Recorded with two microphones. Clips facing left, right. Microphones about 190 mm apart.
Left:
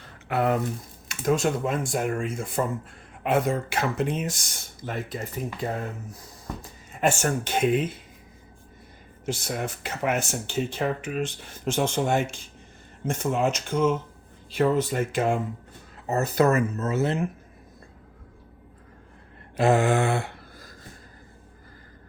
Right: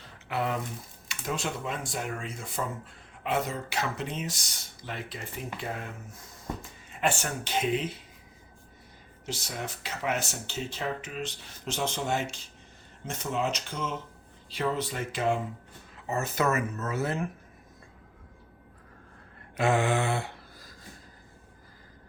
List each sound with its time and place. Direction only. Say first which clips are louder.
0.3 s speech: left 7 dB; 50° left (ahead or behind)
9.2 s speech: left 7 dB; 55° left (ahead or behind); by 17.2 s 25° left (ahead or behind)
19.5 s a sound: left 5 dB; 40° left (ahead or behind)